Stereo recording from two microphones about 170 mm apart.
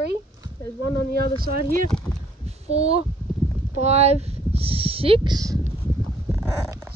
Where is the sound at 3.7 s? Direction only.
40° right (ahead or behind); by 5.7 s 20° right (ahead or behind).